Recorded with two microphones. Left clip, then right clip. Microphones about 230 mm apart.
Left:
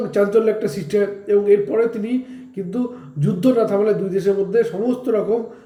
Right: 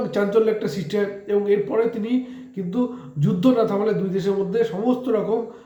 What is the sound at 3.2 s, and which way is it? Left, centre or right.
Speech, right.